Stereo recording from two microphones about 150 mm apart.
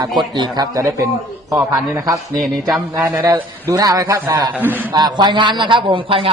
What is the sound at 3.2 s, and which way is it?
A man's voice, 25° right (ahead or behind).